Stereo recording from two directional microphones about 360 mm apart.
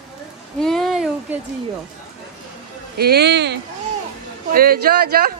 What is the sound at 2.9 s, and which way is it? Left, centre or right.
Speech, right.